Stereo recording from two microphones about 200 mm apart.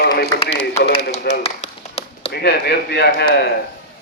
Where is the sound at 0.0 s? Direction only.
50° left (ahead or behind).